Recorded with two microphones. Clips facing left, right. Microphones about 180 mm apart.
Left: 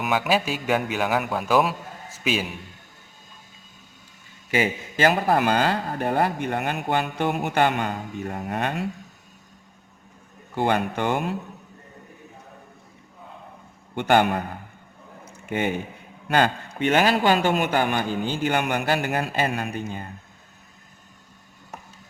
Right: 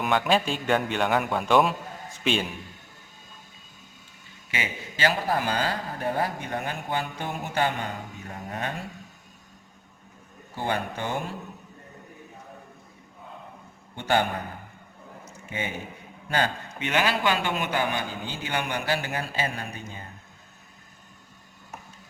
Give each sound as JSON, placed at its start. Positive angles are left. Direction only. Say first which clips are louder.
{"t": 0.0, "sound": "a man's voice", "louder": "left 1 dB", "side_deg": 5}
{"t": 4.5, "sound": "a man's voice", "louder": "left 10 dB", "side_deg": 45}
{"t": 10.5, "sound": "speech", "louder": "left 6 dB", "side_deg": 70}
{"t": 13.9, "sound": "speech", "louder": "left 5 dB", "side_deg": 65}
{"t": 15.4, "sound": "a man's voice", "louder": "left 8 dB", "side_deg": 60}